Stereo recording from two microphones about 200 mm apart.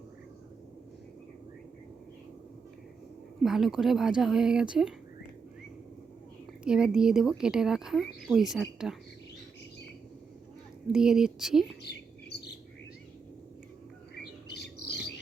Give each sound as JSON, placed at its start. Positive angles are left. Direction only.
{"t": 3.4, "sound": "speech", "side_deg": 0}
{"t": 6.7, "sound": "speech", "side_deg": -5}
{"t": 10.8, "sound": "speech", "side_deg": -5}
{"t": 14.2, "sound": "bird", "side_deg": 55}